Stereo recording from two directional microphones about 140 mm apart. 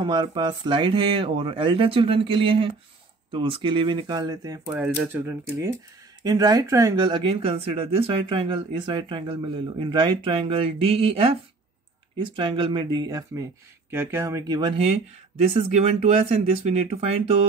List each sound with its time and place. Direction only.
0.0 s speech: 30° right (ahead or behind)
4.6 s speech: 15° right (ahead or behind); by 17.4 s 45° right (ahead or behind)